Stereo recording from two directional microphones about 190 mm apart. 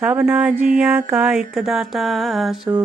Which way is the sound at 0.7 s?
5° right (ahead or behind).